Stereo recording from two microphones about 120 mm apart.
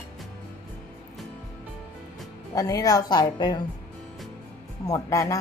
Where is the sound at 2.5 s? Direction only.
30° left (ahead or behind).